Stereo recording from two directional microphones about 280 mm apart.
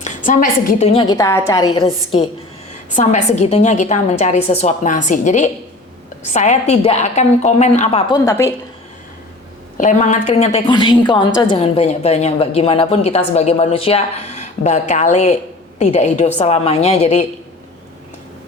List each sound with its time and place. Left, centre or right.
0.3 s a woman's voice: left; by 8.5 s centre
9.7 s a woman's voice: left